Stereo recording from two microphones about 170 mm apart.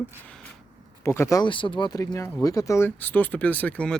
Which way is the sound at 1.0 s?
15° left (ahead or behind).